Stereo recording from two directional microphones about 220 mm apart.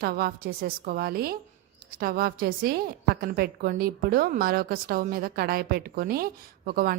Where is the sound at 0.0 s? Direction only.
45° right (ahead or behind).